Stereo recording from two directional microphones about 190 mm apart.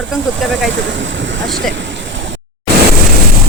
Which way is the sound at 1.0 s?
75° right (ahead or behind).